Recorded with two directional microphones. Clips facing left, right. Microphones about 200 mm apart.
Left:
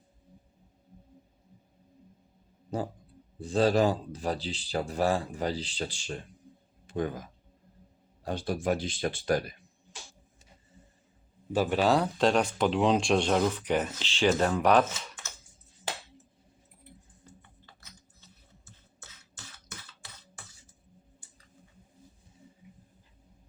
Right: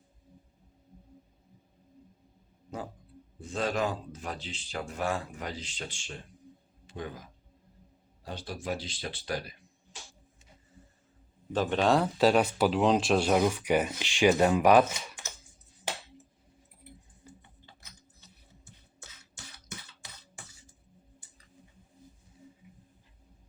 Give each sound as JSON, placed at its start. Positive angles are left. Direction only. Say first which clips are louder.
{"t": 3.4, "sound": "speech", "louder": "left 7 dB", "side_deg": 35}
{"t": 6.8, "sound": "speech", "louder": "left 8 dB", "side_deg": 50}
{"t": 8.2, "sound": "speech", "louder": "left 8 dB", "side_deg": 50}
{"t": 11.5, "sound": "speech", "louder": "left 1 dB", "side_deg": 10}
{"t": 18.2, "sound": "a sound", "louder": "even", "side_deg": -15}